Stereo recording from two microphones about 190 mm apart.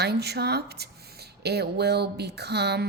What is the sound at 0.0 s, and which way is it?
Speech, 60° right (ahead or behind).